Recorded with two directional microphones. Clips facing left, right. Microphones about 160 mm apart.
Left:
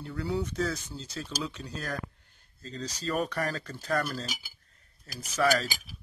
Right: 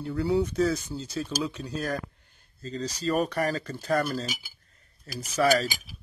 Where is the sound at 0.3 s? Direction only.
10° right (ahead or behind).